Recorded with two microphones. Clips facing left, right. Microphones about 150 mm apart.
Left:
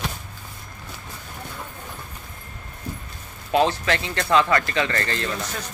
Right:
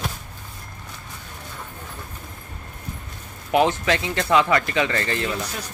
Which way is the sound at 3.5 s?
20° right (ahead or behind).